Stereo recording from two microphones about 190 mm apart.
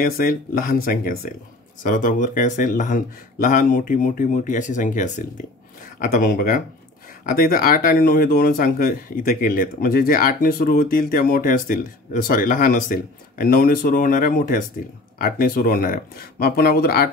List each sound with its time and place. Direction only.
0.0 s speech: 50° left (ahead or behind)